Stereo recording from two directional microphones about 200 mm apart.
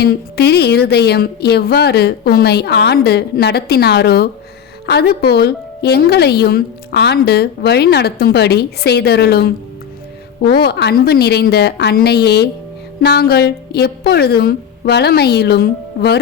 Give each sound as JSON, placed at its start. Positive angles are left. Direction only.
{"t": 0.0, "sound": "a woman's voice", "side_deg": 55}